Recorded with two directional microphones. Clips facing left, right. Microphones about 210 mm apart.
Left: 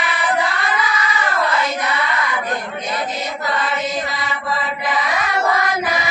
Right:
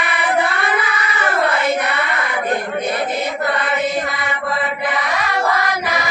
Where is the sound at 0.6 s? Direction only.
60° right (ahead or behind).